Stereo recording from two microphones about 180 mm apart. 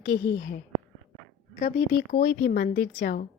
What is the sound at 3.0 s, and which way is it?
Speech, 55° left (ahead or behind).